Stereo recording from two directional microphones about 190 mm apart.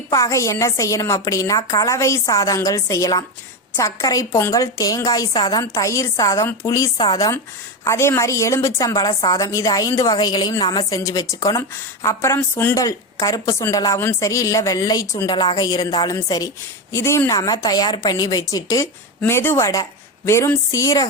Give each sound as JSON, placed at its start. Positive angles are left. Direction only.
{"t": 0.1, "sound": "a woman's voice", "side_deg": 15}